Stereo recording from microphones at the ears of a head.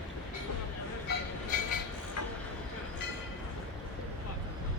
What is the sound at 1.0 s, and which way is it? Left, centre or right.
Train, left.